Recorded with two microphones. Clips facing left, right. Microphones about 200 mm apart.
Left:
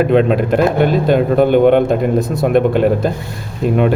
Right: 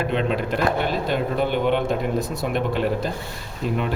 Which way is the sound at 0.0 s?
50° left (ahead or behind).